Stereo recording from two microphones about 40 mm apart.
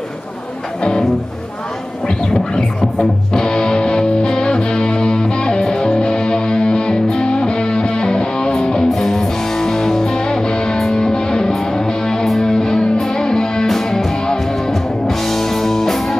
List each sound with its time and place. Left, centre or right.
2.0 s music: centre